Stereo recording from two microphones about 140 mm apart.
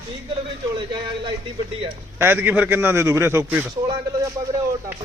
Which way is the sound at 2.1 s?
15° right (ahead or behind).